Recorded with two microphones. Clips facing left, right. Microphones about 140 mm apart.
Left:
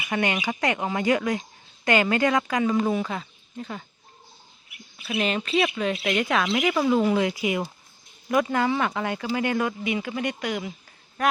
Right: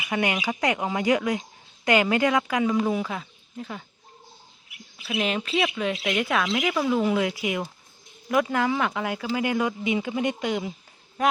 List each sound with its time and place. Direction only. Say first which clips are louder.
0.0 s speech: even; 10° right (ahead or behind)
5.0 s a man's voice: left 1 dB; 10° right (ahead or behind)